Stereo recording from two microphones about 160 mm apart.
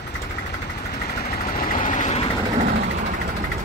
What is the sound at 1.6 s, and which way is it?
Vehicle, 55° left (ahead or behind).